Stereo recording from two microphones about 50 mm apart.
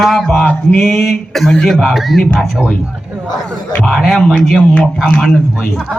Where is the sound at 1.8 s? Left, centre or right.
Centre.